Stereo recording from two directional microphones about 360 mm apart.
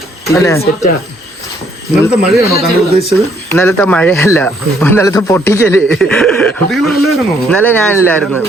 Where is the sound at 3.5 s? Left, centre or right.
Centre.